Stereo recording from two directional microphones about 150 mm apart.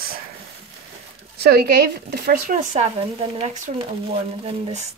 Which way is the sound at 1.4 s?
90° right.